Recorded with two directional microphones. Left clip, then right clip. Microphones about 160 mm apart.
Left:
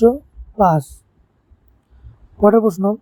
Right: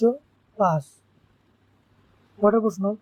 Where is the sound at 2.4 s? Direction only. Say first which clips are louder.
Left 7 dB; 45° left (ahead or behind).